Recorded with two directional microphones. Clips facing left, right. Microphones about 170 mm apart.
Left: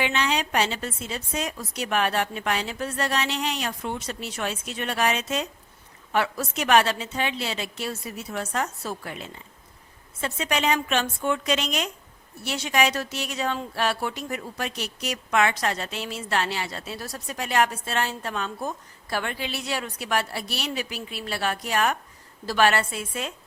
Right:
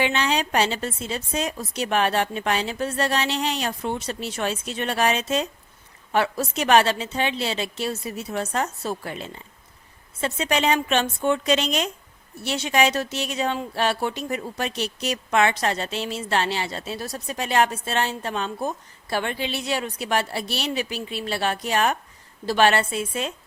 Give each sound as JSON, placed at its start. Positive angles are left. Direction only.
{"t": 0.0, "sound": "a woman's voice", "side_deg": -30}